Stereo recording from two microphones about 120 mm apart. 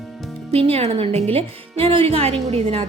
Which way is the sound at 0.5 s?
55° right (ahead or behind).